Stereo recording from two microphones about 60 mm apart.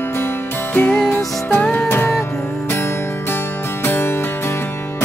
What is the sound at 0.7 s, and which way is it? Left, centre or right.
Music, left.